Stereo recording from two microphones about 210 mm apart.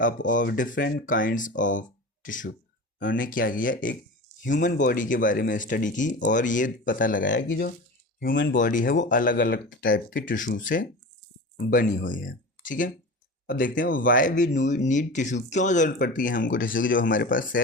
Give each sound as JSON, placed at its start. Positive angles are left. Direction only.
{"t": 0.3, "sound": "speech", "side_deg": 40}
{"t": 7.3, "sound": "speech", "side_deg": 60}
{"t": 8.5, "sound": "speech", "side_deg": 40}